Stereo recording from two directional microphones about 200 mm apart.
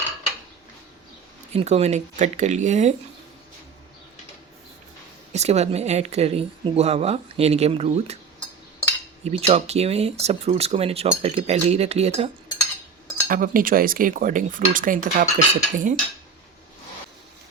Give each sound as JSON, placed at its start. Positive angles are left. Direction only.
{"t": 1.5, "sound": "speech", "side_deg": -30}
{"t": 5.3, "sound": "speech", "side_deg": -35}
{"t": 9.2, "sound": "speech", "side_deg": -30}
{"t": 13.2, "sound": "speech", "side_deg": -45}